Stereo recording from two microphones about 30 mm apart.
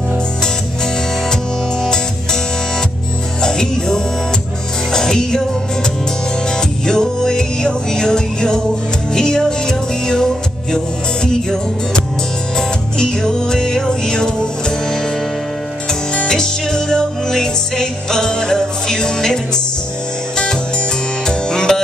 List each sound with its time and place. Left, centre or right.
1.3 s music: left
3.4 s music: left
6.5 s music: left
12.5 s music: left
16.3 s music: left
21.3 s music: left